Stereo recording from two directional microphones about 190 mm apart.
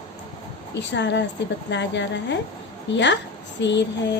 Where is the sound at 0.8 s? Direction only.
65° left (ahead or behind).